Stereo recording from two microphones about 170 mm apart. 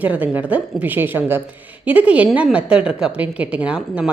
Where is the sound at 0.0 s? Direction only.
10° right (ahead or behind).